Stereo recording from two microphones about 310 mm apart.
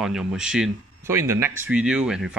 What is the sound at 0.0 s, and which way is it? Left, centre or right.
Speech, centre.